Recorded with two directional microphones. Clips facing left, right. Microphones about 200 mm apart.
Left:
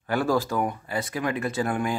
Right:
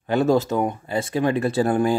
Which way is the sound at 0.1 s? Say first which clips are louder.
Right 5 dB; 20° right (ahead or behind).